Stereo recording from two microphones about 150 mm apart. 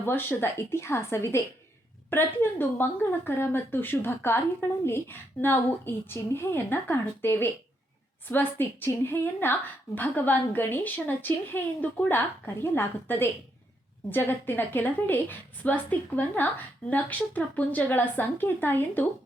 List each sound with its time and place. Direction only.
0.0 s speech: 15° left (ahead or behind)